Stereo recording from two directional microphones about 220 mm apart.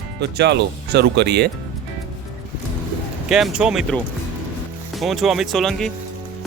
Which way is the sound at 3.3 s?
Centre (ahead or behind).